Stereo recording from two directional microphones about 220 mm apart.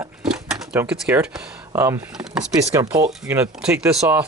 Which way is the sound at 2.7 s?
15° right (ahead or behind).